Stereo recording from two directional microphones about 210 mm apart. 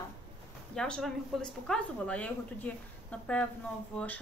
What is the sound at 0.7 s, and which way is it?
A woman's voice, 5° left (ahead or behind).